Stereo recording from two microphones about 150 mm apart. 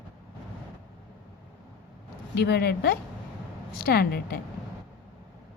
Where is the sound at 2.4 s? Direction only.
90° left.